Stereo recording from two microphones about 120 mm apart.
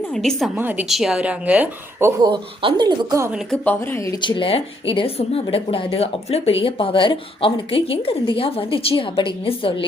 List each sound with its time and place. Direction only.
0.1 s a woman's voice: 5° left (ahead or behind)
0.5 s a woman's voice: 15° right (ahead or behind)
0.9 s a woman's voice: centre (ahead or behind)
2.2 s speech: 45° right (ahead or behind)
3.5 s speech: 15° left (ahead or behind)
4.2 s speech: 45° left (ahead or behind)